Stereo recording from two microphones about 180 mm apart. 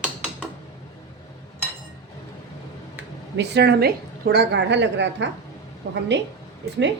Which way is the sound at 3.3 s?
70° right (ahead or behind).